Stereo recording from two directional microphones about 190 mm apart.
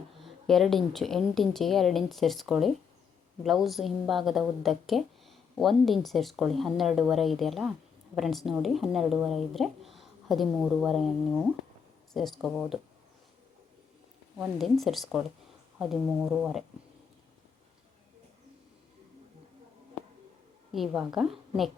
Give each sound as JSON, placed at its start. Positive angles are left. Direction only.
{"t": 0.2, "sound": "speech", "side_deg": 0}
{"t": 14.3, "sound": "speech", "side_deg": 0}
{"t": 20.7, "sound": "speech", "side_deg": 0}